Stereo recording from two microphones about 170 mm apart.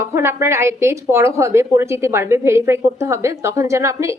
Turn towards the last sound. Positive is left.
turn(degrees=-15)  # may be behind; listen again after turning